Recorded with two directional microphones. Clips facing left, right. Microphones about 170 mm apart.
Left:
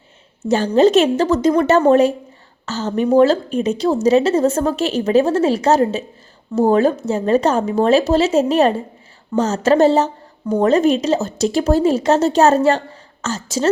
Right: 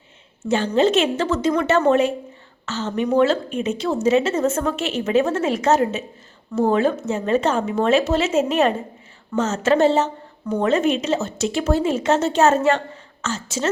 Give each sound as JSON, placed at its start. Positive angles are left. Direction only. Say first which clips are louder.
{"t": 0.4, "sound": "a woman's voice", "louder": "left 5 dB", "side_deg": 40}